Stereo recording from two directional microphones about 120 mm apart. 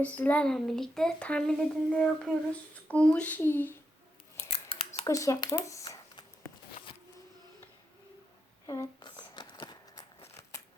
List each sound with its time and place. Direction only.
0.0 s a child's voice: 15° left (ahead or behind)
4.4 s scissors: 50° left (ahead or behind)
5.0 s speech: 25° left (ahead or behind)
8.6 s a sound: 30° left (ahead or behind)